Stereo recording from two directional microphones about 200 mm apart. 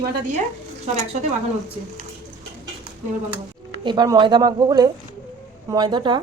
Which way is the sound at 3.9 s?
20° right (ahead or behind).